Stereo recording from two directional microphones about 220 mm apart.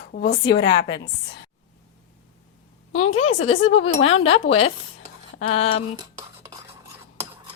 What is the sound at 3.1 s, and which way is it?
Speech, 25° left (ahead or behind).